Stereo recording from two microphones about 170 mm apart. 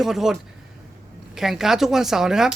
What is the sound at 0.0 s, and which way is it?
Speech, centre (ahead or behind).